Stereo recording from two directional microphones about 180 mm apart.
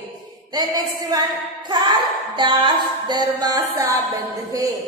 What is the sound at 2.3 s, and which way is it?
A woman's voice, 25° right (ahead or behind).